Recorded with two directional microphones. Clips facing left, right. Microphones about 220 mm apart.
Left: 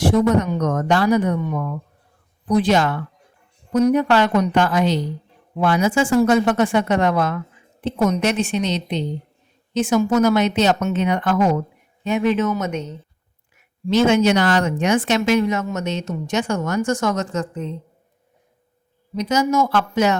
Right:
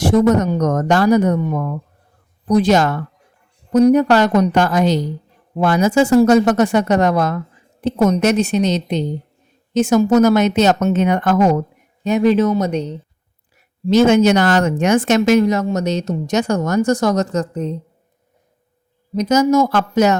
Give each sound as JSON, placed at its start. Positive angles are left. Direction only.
{"t": 0.0, "sound": "a woman's voice", "side_deg": -45}
{"t": 19.1, "sound": "speech", "side_deg": -40}